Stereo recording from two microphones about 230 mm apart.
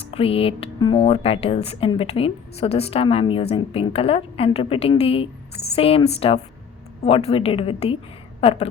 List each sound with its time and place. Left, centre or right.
0.0 s a woman's voice: left